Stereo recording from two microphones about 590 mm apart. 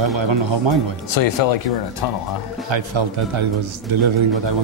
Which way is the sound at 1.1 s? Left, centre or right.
Left.